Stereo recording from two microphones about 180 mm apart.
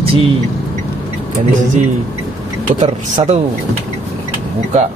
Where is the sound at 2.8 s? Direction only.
40° right (ahead or behind).